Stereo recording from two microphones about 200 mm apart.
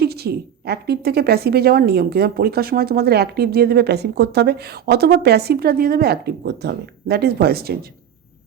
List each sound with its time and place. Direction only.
0.0 s a woman's voice: 50° right (ahead or behind)